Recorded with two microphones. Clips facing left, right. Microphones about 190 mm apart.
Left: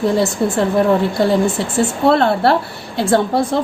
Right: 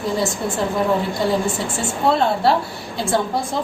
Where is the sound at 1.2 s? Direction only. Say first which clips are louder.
Left 5 dB; 65° left (ahead or behind).